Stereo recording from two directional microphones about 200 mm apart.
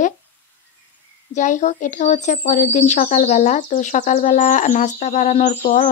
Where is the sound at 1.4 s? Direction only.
35° left (ahead or behind).